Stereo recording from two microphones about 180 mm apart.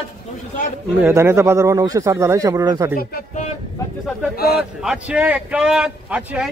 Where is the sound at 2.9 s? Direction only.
55° left (ahead or behind).